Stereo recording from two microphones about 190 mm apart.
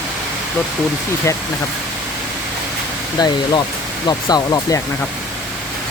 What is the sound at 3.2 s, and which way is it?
Speech, 20° left (ahead or behind).